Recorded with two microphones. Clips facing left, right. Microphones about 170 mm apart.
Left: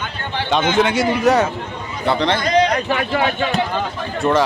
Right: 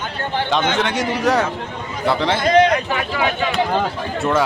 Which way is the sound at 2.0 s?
5° right (ahead or behind).